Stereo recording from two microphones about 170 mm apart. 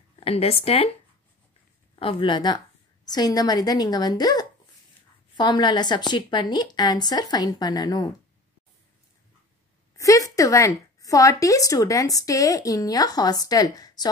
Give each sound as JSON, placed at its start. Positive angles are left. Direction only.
{"t": 0.1, "sound": "speech", "side_deg": 35}
{"t": 2.0, "sound": "a woman's voice", "side_deg": 30}
{"t": 9.9, "sound": "a woman's voice", "side_deg": 20}